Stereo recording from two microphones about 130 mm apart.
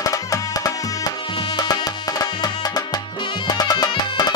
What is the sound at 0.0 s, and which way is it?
Music, 25° left (ahead or behind).